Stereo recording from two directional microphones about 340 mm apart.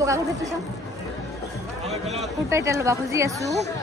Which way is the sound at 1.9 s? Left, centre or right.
Centre.